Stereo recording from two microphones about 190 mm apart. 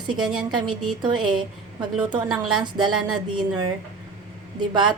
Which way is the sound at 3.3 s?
25° right (ahead or behind).